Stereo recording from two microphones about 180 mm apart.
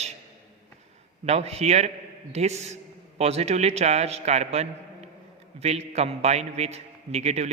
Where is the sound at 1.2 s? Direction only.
35° right (ahead or behind).